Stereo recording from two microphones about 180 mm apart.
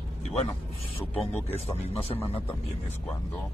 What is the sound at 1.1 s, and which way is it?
Speech, 10° left (ahead or behind).